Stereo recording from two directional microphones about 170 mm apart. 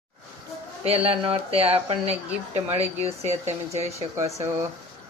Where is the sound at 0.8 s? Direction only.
35° right (ahead or behind).